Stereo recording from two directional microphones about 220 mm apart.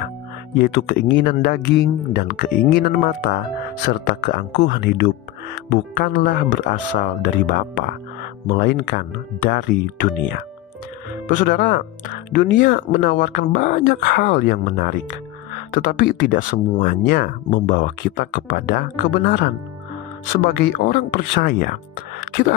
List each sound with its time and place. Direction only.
0.6 s speech: 50° left (ahead or behind)